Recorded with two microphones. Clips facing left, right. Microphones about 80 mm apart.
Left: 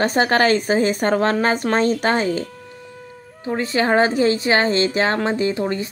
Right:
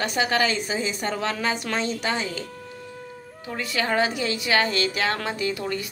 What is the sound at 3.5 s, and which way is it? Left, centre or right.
A woman's voice, left.